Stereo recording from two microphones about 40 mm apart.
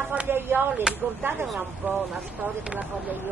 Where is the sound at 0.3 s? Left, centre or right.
Right.